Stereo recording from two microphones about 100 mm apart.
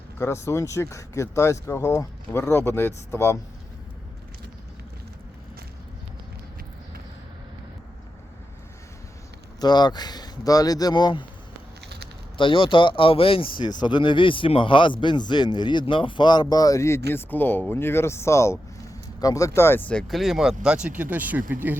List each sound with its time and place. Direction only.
0.2 s speech: 25° left (ahead or behind)
9.6 s speech: 45° left (ahead or behind)
12.4 s speech: 60° left (ahead or behind); by 19.9 s 25° left (ahead or behind)
19.9 s speech: 5° left (ahead or behind); by 21.8 s 20° right (ahead or behind)